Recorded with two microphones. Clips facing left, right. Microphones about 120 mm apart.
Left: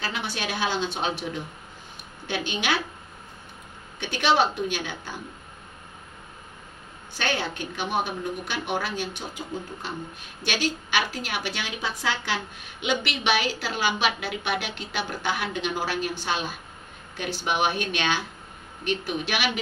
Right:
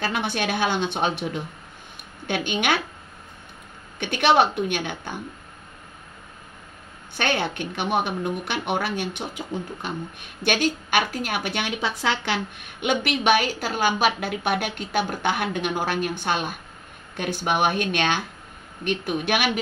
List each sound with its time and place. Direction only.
0.0 s a woman's voice: 55° right (ahead or behind)
2.2 s a woman's voice: 55° right (ahead or behind)
4.0 s a woman's voice: 60° right (ahead or behind)
7.2 s speech: 60° right (ahead or behind)